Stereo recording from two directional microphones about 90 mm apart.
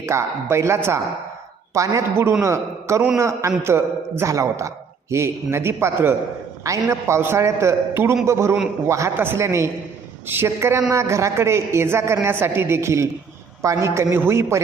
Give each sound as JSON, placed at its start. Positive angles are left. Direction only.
{"t": 0.0, "sound": "a woman's voice", "side_deg": -30}